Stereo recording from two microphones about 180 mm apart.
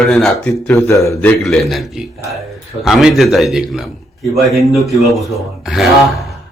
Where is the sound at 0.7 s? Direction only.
15° left (ahead or behind); by 5.9 s centre (ahead or behind).